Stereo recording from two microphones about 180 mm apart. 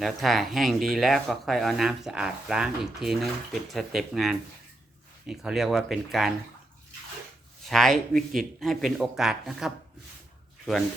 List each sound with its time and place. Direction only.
0.0 s speech: centre (ahead or behind)
7.7 s speech: centre (ahead or behind)